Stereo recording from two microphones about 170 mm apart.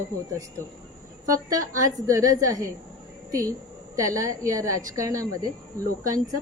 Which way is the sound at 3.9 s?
20° right (ahead or behind).